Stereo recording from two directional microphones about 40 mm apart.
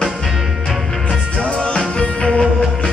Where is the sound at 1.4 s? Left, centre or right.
Left.